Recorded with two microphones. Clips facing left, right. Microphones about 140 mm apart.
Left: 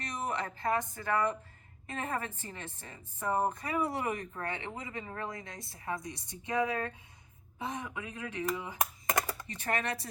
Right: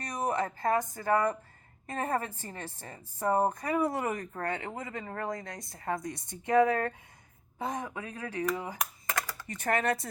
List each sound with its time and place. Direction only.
0.0 s a sound: 45° right (ahead or behind)
0.6 s a woman's voice: 45° right (ahead or behind)
8.8 s computer keyboard: 20° left (ahead or behind)
9.6 s speech: 50° right (ahead or behind)